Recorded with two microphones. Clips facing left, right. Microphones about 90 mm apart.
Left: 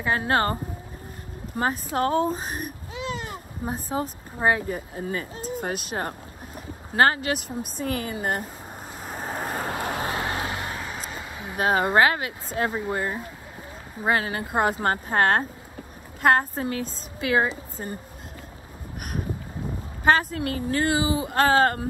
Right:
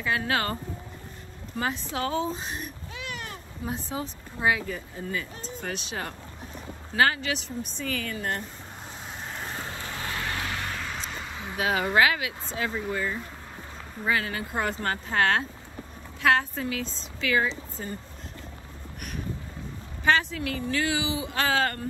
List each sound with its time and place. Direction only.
0.0 s speech: 40° left (ahead or behind)
1.6 s speech: 45° left (ahead or behind)
2.9 s baby cry: 25° left (ahead or behind)
3.6 s speech: 40° left (ahead or behind)
9.0 s vehicle: 45° left (ahead or behind)
9.9 s vehicle: 30° left (ahead or behind)
11.0 s a sound: 15° left (ahead or behind)
11.5 s speech: 40° left (ahead or behind)
12.9 s speech: 35° left (ahead or behind)
14.0 s speech: 55° left (ahead or behind)
18.9 s a sound: 50° left (ahead or behind)
20.1 s speech: 45° left (ahead or behind)